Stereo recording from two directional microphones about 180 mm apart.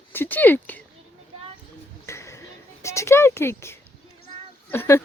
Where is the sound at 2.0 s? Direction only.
15° left (ahead or behind).